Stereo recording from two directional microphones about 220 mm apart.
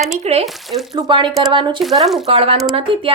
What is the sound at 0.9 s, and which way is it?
Speech, 20° right (ahead or behind).